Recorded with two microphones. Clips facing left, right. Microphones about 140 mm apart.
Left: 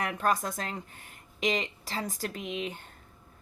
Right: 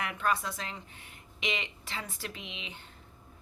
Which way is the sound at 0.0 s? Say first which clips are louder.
Left 3 dB; 40° left (ahead or behind).